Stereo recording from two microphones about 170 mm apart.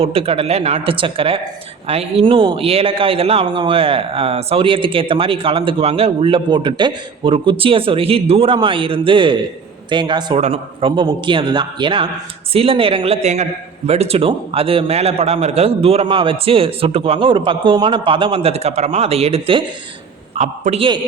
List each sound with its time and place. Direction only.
0.0 s a man's voice: 35° right (ahead or behind)